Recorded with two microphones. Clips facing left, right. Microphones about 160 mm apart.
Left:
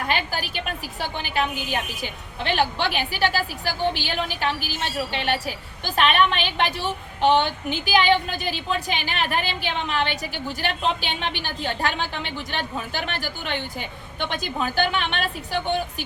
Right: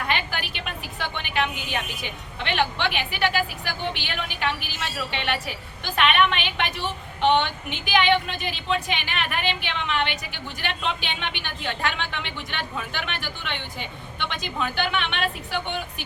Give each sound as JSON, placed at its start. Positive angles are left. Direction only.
{"t": 0.1, "sound": "a woman's voice", "side_deg": 40}